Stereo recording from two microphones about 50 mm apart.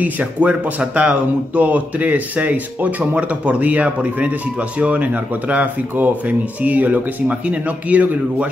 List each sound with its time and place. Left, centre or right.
0.0 s speech: right